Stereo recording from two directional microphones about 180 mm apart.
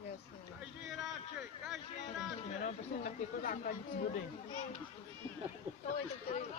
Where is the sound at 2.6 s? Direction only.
45° left (ahead or behind).